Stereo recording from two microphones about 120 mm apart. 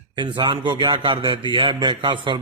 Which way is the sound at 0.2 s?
40° right (ahead or behind).